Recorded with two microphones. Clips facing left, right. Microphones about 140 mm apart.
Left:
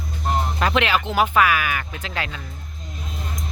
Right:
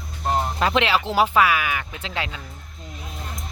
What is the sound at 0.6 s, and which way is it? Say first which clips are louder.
Speech: left 1 dB; 25° right (ahead or behind).